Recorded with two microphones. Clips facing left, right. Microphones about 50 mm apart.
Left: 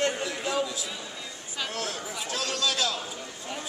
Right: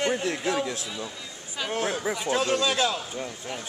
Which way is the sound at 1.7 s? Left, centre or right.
Right.